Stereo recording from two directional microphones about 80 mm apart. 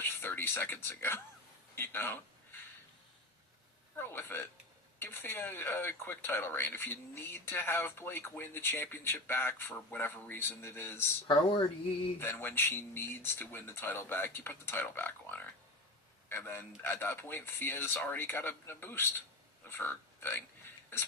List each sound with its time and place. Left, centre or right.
0.0 s speech: left
3.9 s speech: left
11.3 s speech: left
12.2 s speech: left